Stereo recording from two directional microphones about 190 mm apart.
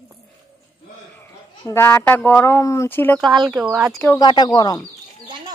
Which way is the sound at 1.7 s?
10° left (ahead or behind).